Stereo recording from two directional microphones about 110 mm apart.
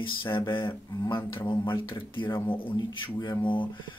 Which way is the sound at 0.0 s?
50° left (ahead or behind).